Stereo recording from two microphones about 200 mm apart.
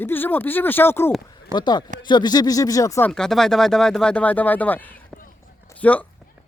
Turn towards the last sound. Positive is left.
turn(degrees=5)  # may be behind; listen again after turning